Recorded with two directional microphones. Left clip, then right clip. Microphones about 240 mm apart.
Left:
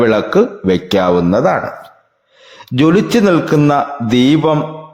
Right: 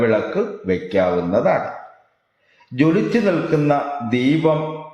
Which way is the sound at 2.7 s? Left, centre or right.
Left.